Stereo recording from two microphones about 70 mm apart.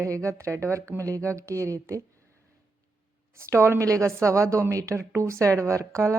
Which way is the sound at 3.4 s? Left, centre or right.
Right.